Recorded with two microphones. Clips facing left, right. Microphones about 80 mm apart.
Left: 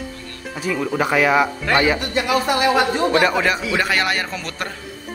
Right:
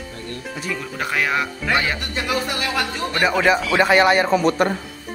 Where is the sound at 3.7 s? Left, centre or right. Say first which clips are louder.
Right 5 dB; right.